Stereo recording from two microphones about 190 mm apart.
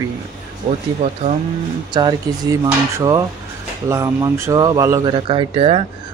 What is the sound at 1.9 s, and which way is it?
Speech, 20° right (ahead or behind).